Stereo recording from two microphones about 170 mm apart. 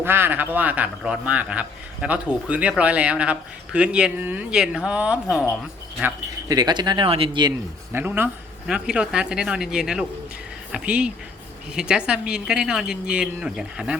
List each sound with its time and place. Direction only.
0.0 s a man's voice: 15° right (ahead or behind)
6.5 s speech: 25° right (ahead or behind)
7.9 s a woman's voice: 10° right (ahead or behind)